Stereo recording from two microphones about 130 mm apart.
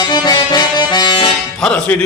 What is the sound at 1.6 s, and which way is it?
Music, 10° left (ahead or behind).